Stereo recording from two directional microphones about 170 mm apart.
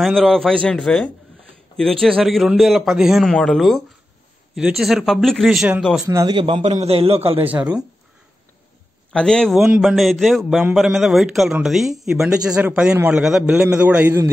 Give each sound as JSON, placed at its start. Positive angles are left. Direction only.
{"t": 0.0, "sound": "a man's voice", "side_deg": 0}
{"t": 6.0, "sound": "a man's voice", "side_deg": -20}
{"t": 7.4, "sound": "speech", "side_deg": -10}
{"t": 9.1, "sound": "a man's voice", "side_deg": 5}